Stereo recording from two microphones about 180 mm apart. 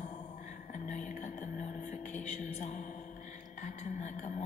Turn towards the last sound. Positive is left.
turn(degrees=45)  # may be behind; listen again after turning